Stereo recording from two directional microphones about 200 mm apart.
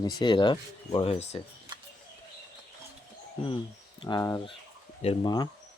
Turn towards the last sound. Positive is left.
turn(degrees=20)  # may be behind; listen again after turning